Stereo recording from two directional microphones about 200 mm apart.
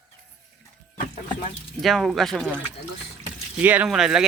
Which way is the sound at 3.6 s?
10° right (ahead or behind).